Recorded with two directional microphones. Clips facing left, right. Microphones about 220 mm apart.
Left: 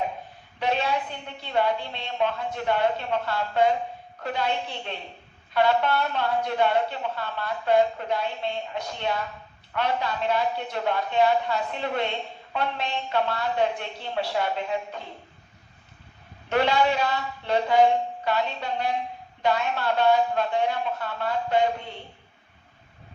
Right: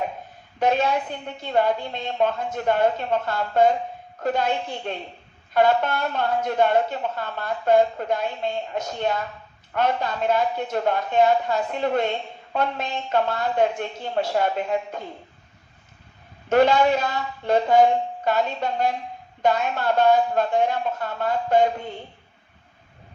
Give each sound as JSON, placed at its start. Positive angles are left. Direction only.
{"t": 0.6, "sound": "speech", "side_deg": -45}
{"t": 16.5, "sound": "speech", "side_deg": -45}